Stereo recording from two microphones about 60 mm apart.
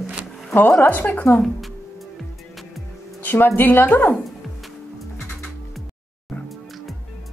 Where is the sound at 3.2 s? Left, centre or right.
Left.